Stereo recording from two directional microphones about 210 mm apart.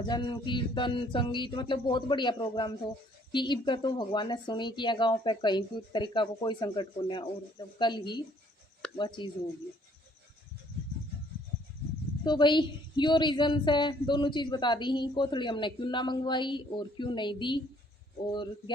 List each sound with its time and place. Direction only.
0.0 s a woman's voice: 20° left (ahead or behind)
12.2 s a woman's voice: 20° left (ahead or behind)